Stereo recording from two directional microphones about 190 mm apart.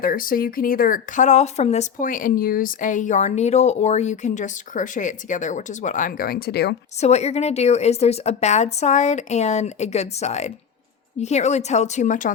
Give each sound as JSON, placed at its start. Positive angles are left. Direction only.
{"t": 0.0, "sound": "speech", "side_deg": 45}
{"t": 7.0, "sound": "a woman's voice", "side_deg": 35}